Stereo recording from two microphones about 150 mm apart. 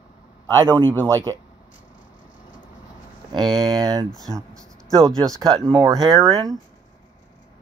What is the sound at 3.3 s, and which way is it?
Speech, 30° right (ahead or behind).